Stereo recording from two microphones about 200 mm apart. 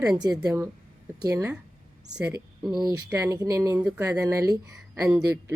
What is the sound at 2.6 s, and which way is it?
A woman's voice, 20° right (ahead or behind).